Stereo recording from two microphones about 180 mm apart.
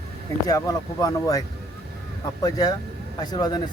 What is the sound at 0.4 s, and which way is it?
Speech, 20° left (ahead or behind).